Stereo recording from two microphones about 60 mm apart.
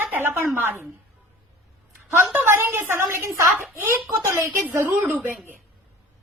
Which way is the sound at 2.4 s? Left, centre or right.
Right.